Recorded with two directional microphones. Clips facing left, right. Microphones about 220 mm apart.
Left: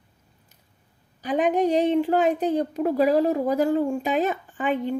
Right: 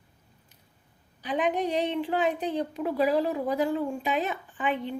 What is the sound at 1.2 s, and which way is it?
A woman's voice, 45° left (ahead or behind).